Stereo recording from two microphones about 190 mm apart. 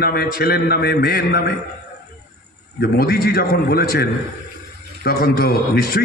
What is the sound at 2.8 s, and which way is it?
A man's voice, 55° left (ahead or behind).